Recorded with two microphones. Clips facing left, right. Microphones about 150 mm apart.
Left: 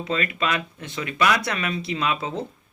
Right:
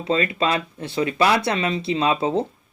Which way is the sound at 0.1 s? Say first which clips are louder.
Right 5 dB; 30° right (ahead or behind).